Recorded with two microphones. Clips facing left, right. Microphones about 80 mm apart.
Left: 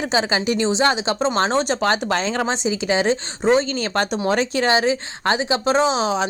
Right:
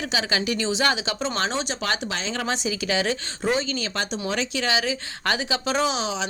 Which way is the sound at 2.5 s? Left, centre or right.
Left.